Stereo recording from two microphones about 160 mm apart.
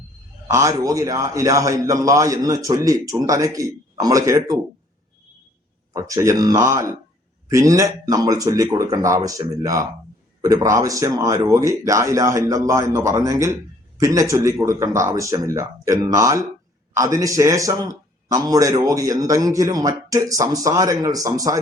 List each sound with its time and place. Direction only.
0.4 s speech: 20° right (ahead or behind)
5.9 s speech: 20° right (ahead or behind)